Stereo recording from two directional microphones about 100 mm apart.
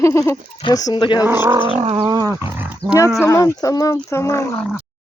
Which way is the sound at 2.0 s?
40° right (ahead or behind).